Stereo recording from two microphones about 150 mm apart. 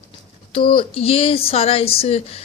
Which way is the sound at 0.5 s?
35° left (ahead or behind).